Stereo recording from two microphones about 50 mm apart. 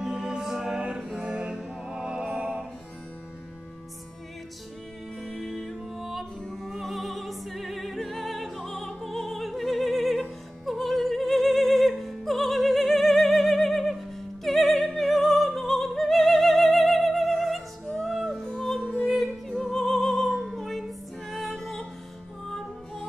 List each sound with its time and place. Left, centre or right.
0.0 s music: centre
5.2 s music: centre
6.6 s opera: centre
10.6 s music: centre